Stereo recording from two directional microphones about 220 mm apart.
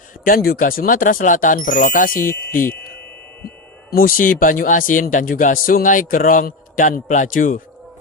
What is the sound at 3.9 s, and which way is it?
Speech, 40° left (ahead or behind).